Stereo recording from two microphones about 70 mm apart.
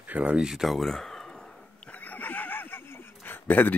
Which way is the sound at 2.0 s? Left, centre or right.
Left.